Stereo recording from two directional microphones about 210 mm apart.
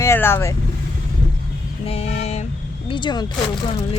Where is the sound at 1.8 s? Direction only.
30° left (ahead or behind).